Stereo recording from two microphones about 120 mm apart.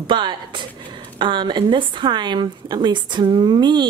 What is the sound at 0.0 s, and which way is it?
A woman's voice, 40° right (ahead or behind).